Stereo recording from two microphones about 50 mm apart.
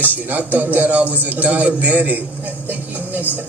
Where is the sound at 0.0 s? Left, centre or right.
Right.